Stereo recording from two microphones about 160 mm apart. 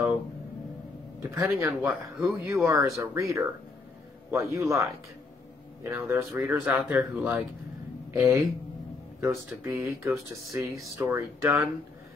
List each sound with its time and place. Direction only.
1.3 s speech: 20° right (ahead or behind)
1.8 s speech: 5° right (ahead or behind)
2.2 s speech: 15° right (ahead or behind)
5.9 s speech: 15° right (ahead or behind)
6.6 s speech: 5° right (ahead or behind)